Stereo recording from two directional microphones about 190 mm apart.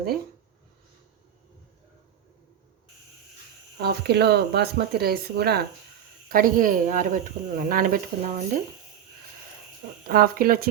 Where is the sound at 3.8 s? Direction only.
60° right (ahead or behind).